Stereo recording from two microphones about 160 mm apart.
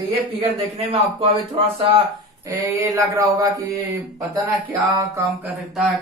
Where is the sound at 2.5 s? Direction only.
20° right (ahead or behind).